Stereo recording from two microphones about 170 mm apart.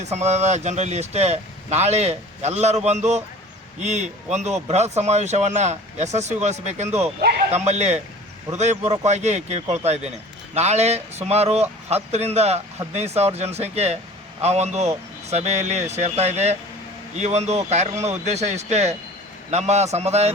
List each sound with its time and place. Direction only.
0.0 s speech: 40° right (ahead or behind)